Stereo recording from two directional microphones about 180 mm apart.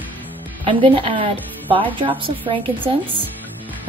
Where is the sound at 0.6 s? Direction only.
30° right (ahead or behind).